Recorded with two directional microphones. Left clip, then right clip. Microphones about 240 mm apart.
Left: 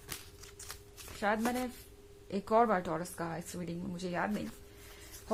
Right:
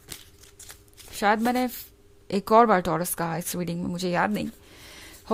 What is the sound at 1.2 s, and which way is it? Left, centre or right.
A woman's voice, right.